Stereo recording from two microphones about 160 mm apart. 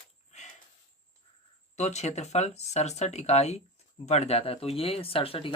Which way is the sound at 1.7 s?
45° left (ahead or behind).